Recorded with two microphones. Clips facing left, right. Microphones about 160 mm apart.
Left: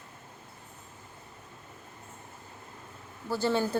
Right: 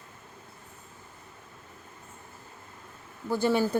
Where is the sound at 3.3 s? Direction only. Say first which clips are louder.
Right 3 dB; 15° right (ahead or behind).